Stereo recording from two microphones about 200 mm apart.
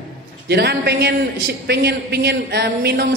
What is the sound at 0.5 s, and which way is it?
Mantra, 55° right (ahead or behind).